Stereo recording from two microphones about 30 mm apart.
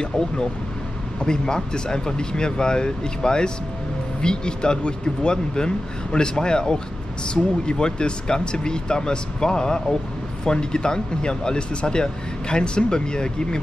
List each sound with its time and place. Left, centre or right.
1.2 s speech: left